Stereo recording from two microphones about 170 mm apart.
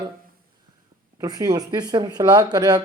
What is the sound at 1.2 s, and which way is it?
Speech, 25° right (ahead or behind).